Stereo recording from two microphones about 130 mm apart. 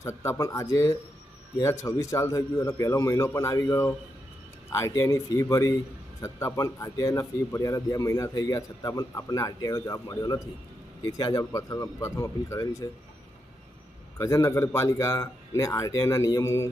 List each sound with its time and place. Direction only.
0.0 s a man's voice: 20° left (ahead or behind)
14.2 s a man's voice: 20° left (ahead or behind)